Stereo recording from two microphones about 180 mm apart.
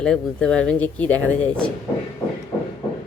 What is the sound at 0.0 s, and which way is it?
Speech, 5° left (ahead or behind).